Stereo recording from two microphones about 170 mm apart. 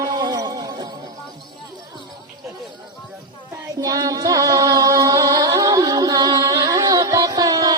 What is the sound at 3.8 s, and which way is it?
Music, 20° right (ahead or behind).